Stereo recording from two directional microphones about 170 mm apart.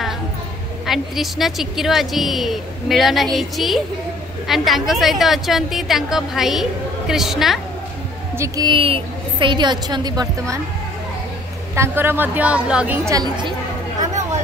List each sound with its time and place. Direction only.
0.8 s a woman's voice: centre (ahead or behind)
8.4 s a woman's voice: 25° right (ahead or behind)
11.7 s a woman's voice: 15° right (ahead or behind)
13.1 s a woman's voice: 25° right (ahead or behind)